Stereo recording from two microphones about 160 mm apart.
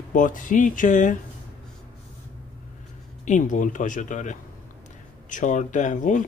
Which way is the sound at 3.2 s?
50° left (ahead or behind).